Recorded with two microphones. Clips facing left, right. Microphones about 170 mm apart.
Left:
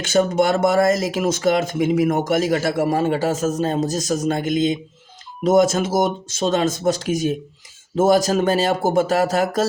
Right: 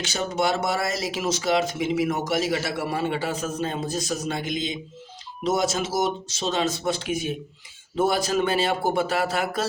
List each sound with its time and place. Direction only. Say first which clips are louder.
0.0 s speech: left 8 dB; 50° left (ahead or behind)